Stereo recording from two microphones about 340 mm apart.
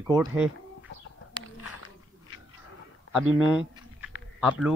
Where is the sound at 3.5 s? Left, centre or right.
Centre.